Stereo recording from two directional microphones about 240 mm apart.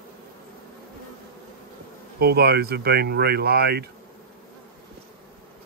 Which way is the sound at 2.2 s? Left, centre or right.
Right.